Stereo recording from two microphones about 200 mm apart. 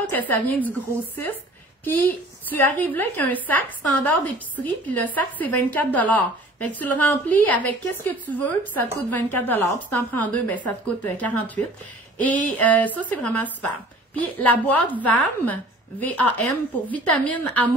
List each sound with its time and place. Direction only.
0.1 s a woman's voice: 10° left (ahead or behind)
2.5 s a woman's voice: 10° left (ahead or behind)